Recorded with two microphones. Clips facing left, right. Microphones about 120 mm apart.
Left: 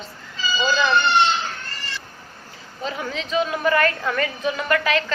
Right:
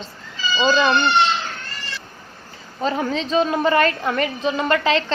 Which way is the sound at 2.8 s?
35° right (ahead or behind).